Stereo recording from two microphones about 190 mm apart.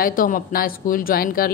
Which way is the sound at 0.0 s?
45° left (ahead or behind).